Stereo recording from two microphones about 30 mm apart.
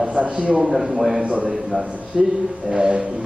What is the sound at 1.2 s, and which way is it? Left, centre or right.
Speech, right.